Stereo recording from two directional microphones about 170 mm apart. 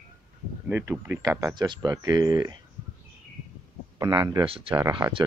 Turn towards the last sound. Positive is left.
turn(degrees=-25)  # may be behind; listen again after turning